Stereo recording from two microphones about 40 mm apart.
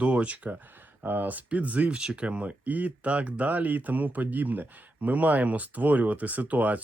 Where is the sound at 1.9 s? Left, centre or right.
Right.